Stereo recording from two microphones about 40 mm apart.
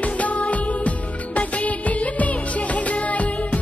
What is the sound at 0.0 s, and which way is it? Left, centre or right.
Music of bollywood, left.